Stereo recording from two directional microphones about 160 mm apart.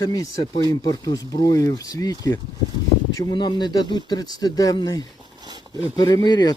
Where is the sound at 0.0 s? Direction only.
25° left (ahead or behind).